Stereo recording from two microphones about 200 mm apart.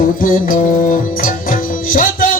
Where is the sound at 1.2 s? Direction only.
45° left (ahead or behind).